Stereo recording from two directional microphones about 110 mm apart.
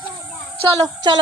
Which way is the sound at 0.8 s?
40° right (ahead or behind).